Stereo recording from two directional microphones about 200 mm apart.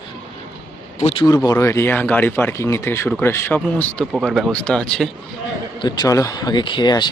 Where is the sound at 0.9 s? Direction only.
30° left (ahead or behind).